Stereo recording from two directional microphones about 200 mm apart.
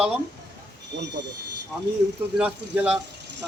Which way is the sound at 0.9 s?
60° right (ahead or behind).